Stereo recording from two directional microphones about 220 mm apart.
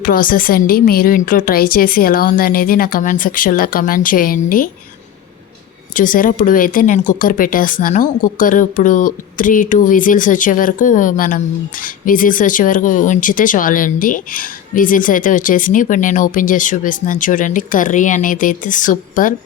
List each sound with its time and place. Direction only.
0.0 s speech: 40° left (ahead or behind)
5.9 s speech: 40° left (ahead or behind)